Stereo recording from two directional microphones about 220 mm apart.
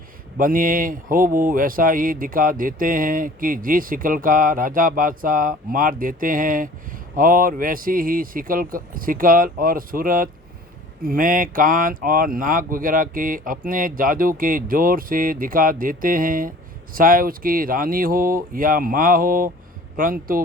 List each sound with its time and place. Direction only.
0.3 s speech: 40° right (ahead or behind)